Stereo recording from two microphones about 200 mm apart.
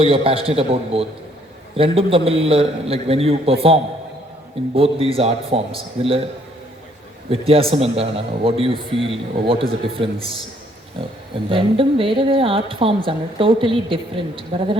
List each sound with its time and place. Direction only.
0.0 s a man's voice: 25° right (ahead or behind)
7.3 s a man's voice: 30° right (ahead or behind)
11.4 s a man's voice: 25° right (ahead or behind)